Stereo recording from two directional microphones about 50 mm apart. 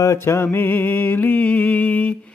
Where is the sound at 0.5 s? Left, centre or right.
Left.